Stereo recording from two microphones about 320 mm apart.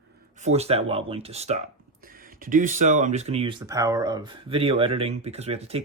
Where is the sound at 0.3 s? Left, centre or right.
Centre.